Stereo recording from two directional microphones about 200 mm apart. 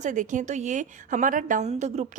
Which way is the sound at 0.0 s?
40° right (ahead or behind).